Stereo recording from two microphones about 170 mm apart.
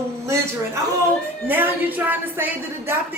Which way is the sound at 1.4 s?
10° right (ahead or behind).